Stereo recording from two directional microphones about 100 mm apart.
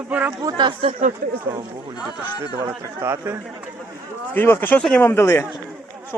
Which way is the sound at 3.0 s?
25° right (ahead or behind).